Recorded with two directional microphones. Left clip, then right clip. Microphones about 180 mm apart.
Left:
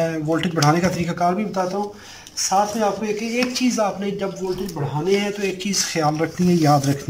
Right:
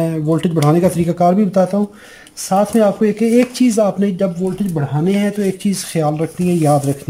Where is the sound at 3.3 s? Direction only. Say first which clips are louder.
Right 8 dB; 40° right (ahead or behind).